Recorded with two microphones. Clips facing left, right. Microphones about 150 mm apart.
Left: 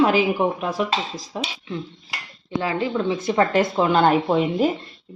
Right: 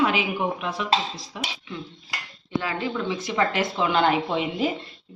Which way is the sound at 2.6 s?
30° left (ahead or behind).